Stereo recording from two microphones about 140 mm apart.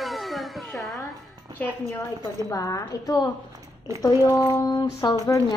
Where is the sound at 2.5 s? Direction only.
25° left (ahead or behind).